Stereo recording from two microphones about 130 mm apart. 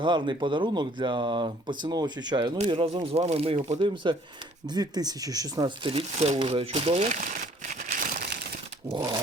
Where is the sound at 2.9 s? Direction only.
50° right (ahead or behind).